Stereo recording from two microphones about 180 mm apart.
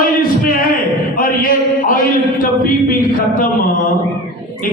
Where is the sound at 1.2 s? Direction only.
50° left (ahead or behind).